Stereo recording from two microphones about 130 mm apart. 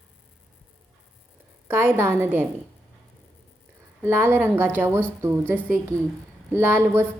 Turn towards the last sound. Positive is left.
turn(degrees=-15)  # may be behind; listen again after turning